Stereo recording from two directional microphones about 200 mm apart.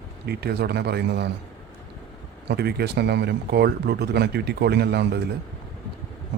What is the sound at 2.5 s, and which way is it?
Speech, 55° right (ahead or behind).